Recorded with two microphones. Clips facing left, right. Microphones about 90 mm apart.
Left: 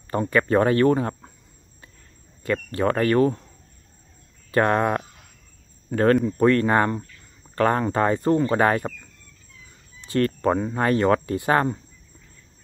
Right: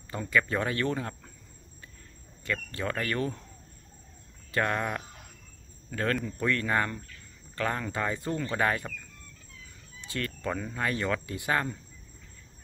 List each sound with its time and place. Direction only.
0.1 s speech: 50° left (ahead or behind)
0.9 s speech: 30° left (ahead or behind)
2.4 s speech: 30° left (ahead or behind)
4.5 s speech: 45° left (ahead or behind)
8.5 s speech: 30° left (ahead or behind)
10.2 s speech: 40° left (ahead or behind)